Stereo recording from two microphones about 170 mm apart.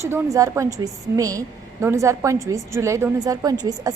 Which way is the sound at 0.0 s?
20° right (ahead or behind).